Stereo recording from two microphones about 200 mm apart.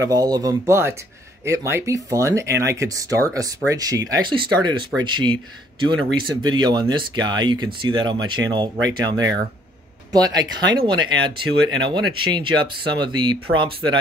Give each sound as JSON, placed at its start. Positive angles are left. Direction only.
{"t": 0.0, "sound": "speech", "side_deg": -20}